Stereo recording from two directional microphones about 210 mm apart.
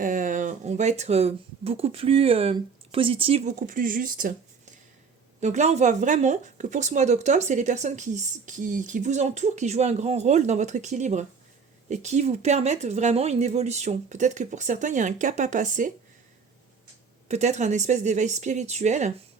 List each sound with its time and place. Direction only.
0.0 s speech: 40° right (ahead or behind)
5.4 s speech: 35° right (ahead or behind)
17.2 s speech: 30° right (ahead or behind)